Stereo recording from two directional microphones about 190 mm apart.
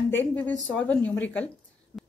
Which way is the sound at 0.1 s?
10° left (ahead or behind).